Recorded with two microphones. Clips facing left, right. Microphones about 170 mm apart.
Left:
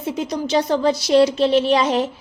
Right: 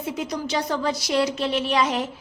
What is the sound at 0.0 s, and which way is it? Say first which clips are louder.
A woman's voice: left 4 dB; 25° left (ahead or behind).